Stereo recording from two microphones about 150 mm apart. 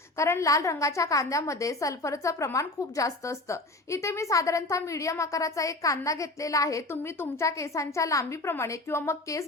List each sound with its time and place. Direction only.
0.2 s a woman's voice: 20° left (ahead or behind)